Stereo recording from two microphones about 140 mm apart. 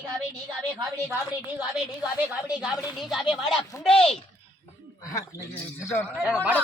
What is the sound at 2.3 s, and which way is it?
A woman's voice, 5° right (ahead or behind).